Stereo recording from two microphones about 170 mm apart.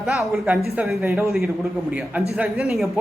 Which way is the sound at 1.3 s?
Centre (ahead or behind).